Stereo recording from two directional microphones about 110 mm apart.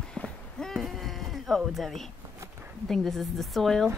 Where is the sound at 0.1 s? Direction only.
5° left (ahead or behind).